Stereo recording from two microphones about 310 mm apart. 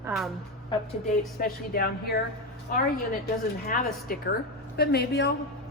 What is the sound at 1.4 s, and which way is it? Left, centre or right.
Speech, left.